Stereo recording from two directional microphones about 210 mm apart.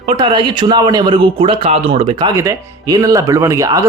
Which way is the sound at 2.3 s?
15° right (ahead or behind).